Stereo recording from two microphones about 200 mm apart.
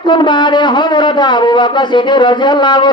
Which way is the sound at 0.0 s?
25° left (ahead or behind).